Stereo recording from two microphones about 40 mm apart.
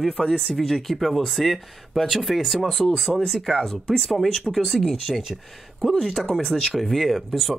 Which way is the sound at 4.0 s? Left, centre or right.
Centre.